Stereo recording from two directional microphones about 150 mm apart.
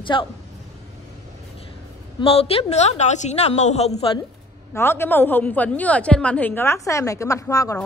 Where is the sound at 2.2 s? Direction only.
40° left (ahead or behind).